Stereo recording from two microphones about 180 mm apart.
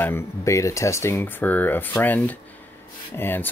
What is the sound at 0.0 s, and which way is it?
Speech, 15° left (ahead or behind).